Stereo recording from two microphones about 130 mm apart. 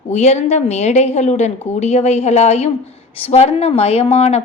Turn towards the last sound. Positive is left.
turn(degrees=50)  # may be behind; listen again after turning